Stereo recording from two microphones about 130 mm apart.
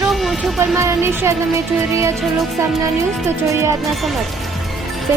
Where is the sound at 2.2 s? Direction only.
Centre (ahead or behind).